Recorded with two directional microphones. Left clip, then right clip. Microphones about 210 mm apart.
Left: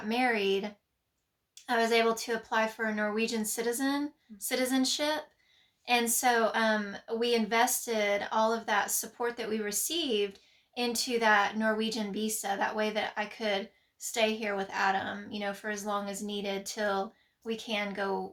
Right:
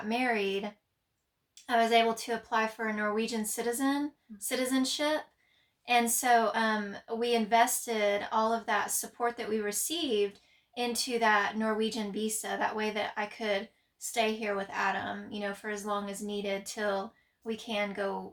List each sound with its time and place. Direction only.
0.1 s speech: 15° left (ahead or behind)